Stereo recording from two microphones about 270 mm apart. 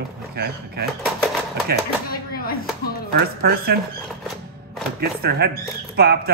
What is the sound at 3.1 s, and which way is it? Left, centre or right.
Speech, right.